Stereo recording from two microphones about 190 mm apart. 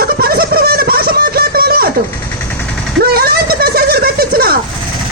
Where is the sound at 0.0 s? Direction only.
50° right (ahead or behind).